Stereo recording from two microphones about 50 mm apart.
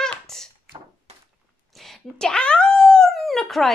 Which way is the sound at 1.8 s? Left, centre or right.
Centre.